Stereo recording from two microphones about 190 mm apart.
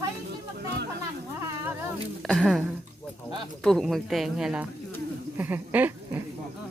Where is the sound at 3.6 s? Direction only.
Centre (ahead or behind).